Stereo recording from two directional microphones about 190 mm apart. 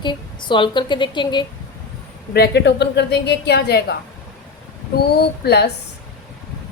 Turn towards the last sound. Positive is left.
turn(degrees=60)  # may be behind; listen again after turning